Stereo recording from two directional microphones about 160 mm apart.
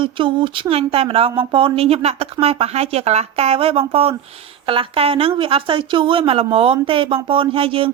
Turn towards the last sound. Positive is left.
turn(degrees=-35)  # may be behind; listen again after turning